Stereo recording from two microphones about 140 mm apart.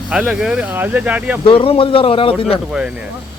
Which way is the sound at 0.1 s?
5° right (ahead or behind).